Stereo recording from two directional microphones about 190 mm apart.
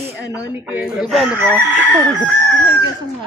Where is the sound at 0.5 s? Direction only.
5° right (ahead or behind).